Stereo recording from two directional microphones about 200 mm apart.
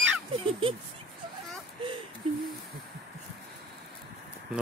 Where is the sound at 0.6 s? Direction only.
25° right (ahead or behind).